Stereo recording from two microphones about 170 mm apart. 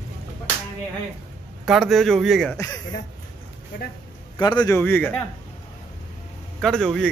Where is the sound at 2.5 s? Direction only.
20° left (ahead or behind).